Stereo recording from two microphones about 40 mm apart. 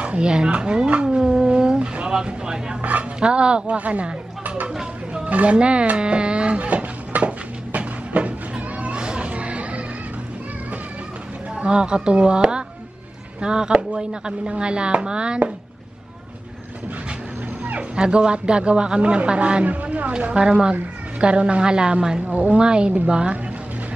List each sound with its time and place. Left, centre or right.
0.0 s a sound: right
0.3 s a man's voice: right
1.0 s a sound: centre
1.8 s speech: right
2.1 s a man's voice: centre
2.8 s speech: right
3.2 s a man's voice: right
5.1 s a sound: right
9.0 s children playing: right
11.5 s a man's voice: right
17.9 s a man's voice: right
22.3 s speech: right
22.6 s a man's voice: right